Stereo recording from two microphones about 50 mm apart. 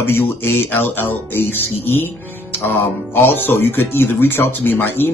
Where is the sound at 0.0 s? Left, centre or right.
Left.